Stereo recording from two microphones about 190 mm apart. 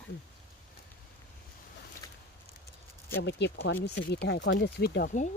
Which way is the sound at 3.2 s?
65° left (ahead or behind).